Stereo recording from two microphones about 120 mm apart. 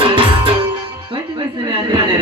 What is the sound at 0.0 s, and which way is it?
Music, 45° right (ahead or behind).